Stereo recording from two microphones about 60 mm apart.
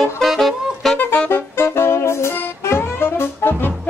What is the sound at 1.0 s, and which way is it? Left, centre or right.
Saxophone, left.